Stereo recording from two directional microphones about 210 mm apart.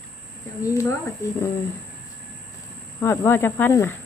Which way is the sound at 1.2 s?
15° left (ahead or behind).